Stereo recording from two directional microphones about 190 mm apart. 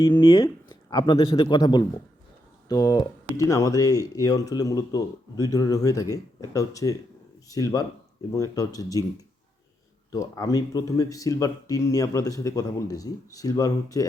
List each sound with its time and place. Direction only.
0.0 s speech: 25° left (ahead or behind)
10.1 s speech: 15° left (ahead or behind)